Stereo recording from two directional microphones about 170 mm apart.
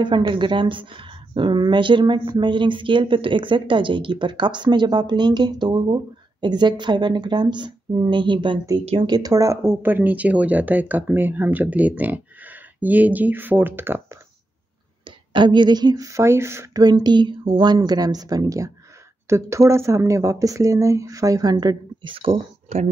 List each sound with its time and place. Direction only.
0.0 s speech: 30° right (ahead or behind)
15.0 s speech: 25° right (ahead or behind)